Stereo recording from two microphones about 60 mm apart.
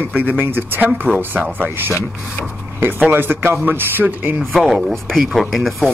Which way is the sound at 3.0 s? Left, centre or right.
Right.